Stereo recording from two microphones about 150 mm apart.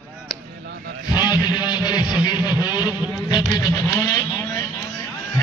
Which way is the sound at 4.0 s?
25° left (ahead or behind).